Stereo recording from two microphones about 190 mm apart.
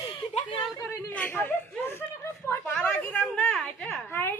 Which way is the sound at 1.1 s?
10° left (ahead or behind).